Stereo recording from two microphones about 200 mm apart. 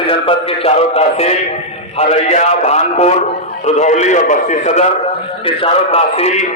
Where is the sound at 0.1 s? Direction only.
30° left (ahead or behind).